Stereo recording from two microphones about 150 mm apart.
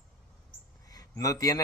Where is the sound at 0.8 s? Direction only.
25° left (ahead or behind).